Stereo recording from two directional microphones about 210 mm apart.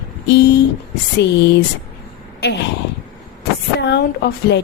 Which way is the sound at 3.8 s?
55° left (ahead or behind).